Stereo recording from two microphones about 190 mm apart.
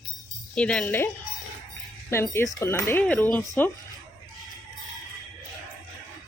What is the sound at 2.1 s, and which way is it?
Speech, 15° left (ahead or behind).